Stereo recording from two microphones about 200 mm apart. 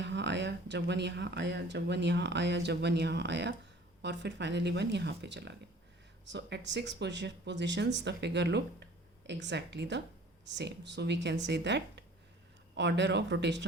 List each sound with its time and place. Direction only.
0.0 s speech: 60° right (ahead or behind)